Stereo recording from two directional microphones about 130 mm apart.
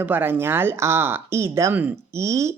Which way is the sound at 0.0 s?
15° right (ahead or behind).